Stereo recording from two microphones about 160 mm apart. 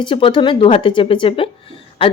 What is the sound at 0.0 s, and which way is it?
A woman's voice, 30° left (ahead or behind).